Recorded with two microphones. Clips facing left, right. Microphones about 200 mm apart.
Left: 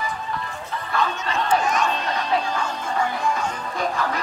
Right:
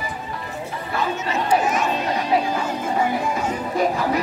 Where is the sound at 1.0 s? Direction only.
10° right (ahead or behind).